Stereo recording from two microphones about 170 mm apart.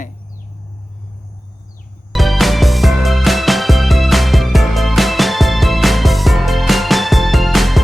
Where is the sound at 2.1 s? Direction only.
Centre (ahead or behind).